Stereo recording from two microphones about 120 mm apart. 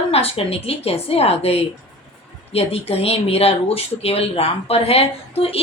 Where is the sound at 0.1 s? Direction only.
55° left (ahead or behind).